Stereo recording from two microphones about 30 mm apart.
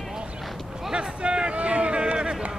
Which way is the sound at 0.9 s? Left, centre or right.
Right.